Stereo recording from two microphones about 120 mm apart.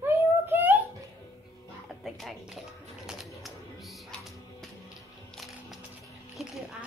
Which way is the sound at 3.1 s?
Centre (ahead or behind).